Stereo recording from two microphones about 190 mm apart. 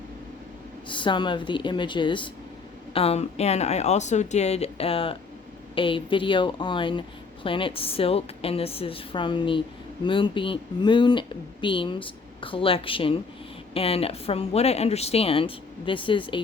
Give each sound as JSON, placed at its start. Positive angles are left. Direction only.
{"t": 0.9, "sound": "a woman's voice", "side_deg": 25}